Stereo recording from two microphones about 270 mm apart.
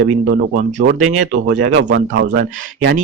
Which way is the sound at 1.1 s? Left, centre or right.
Right.